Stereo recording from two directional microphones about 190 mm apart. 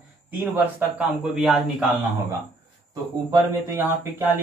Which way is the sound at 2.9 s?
20° right (ahead or behind).